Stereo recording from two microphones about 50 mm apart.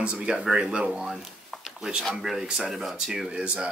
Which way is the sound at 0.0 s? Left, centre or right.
Centre.